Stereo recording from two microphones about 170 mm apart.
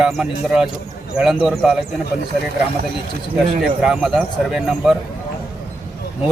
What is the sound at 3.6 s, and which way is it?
Speech, 5° right (ahead or behind).